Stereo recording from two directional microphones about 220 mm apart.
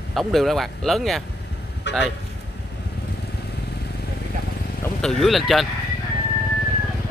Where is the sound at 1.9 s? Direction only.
50° left (ahead or behind).